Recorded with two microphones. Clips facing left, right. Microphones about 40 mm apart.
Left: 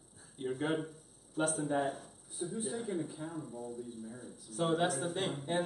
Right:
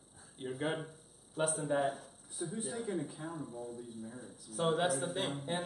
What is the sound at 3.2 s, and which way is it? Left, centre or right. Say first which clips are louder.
Speech: even; centre.